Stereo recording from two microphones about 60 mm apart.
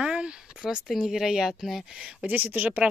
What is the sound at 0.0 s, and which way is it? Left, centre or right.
Speech, centre.